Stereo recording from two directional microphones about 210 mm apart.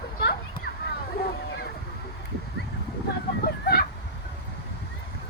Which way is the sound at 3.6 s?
50° left (ahead or behind).